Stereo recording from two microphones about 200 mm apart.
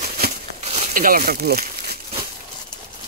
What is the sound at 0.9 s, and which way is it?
Speech, 45° right (ahead or behind).